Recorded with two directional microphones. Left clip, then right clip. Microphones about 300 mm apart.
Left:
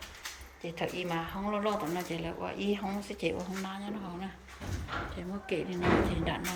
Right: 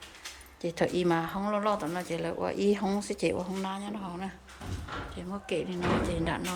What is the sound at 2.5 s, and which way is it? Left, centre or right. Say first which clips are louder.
Speech: right 7 dB; right.